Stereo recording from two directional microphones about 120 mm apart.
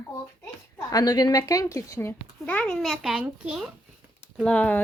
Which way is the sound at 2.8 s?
5° right (ahead or behind).